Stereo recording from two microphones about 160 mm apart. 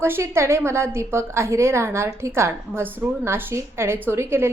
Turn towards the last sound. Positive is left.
turn(degrees=-15)  # may be behind; listen again after turning